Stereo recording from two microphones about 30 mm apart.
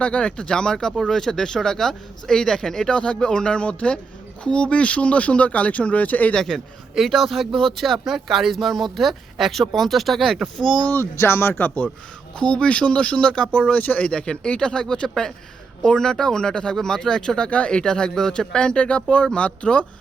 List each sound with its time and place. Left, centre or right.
0.0 s speech: left; by 2.9 s centre
2.9 s speech: left
6.3 s speech: centre
7.1 s speech: centre
8.0 s speech: centre
11.6 s a man's voice: left
12.4 s speech: left
13.7 s speech: left
14.1 s speech: left
17.5 s speech: left